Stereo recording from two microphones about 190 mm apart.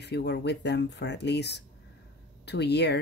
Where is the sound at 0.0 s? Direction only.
60° left (ahead or behind).